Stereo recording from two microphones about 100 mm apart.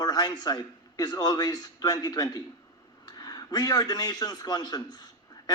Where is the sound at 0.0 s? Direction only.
40° left (ahead or behind).